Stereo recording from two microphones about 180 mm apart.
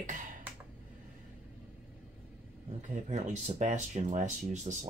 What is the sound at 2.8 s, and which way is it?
Speech, 40° right (ahead or behind).